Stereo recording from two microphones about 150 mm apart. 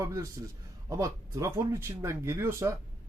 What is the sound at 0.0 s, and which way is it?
Speech, 20° right (ahead or behind).